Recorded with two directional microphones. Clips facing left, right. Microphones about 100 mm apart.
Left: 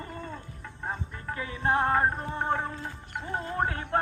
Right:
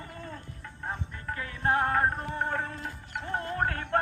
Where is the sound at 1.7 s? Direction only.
15° left (ahead or behind).